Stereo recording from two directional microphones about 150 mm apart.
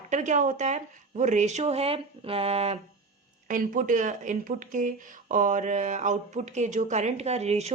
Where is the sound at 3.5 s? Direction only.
60° right (ahead or behind).